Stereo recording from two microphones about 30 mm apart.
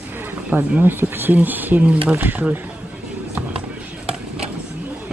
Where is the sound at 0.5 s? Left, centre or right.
Right.